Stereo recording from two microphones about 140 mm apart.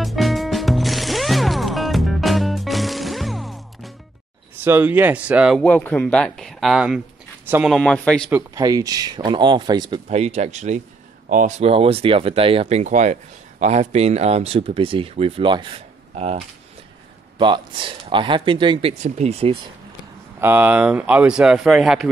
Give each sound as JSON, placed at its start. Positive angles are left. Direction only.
{"t": 0.0, "sound": "music", "side_deg": 0}
{"t": 4.6, "sound": "speech", "side_deg": -15}
{"t": 5.6, "sound": "speech", "side_deg": 10}
{"t": 7.4, "sound": "speech", "side_deg": -15}
{"t": 7.7, "sound": "speech", "side_deg": 5}
{"t": 8.5, "sound": "speech", "side_deg": -25}
{"t": 10.0, "sound": "speech", "side_deg": -50}
{"t": 11.2, "sound": "speech", "side_deg": -65}
{"t": 11.6, "sound": "speech", "side_deg": -45}
{"t": 17.4, "sound": "speech", "side_deg": -35}
{"t": 19.0, "sound": "speech", "side_deg": -55}
{"t": 20.3, "sound": "speech", "side_deg": -15}